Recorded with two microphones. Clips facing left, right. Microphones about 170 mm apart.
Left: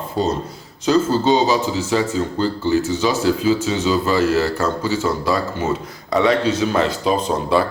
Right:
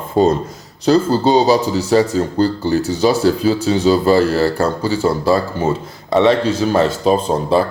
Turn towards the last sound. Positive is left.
turn(degrees=-35)  # may be behind; listen again after turning